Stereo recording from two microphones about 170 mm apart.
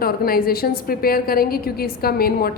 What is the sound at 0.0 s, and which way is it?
A woman's voice, 60° left (ahead or behind).